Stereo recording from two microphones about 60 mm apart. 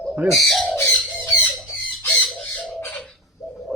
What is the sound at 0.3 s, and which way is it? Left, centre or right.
Speech, centre.